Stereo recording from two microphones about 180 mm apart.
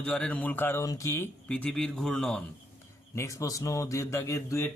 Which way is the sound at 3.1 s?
15° left (ahead or behind).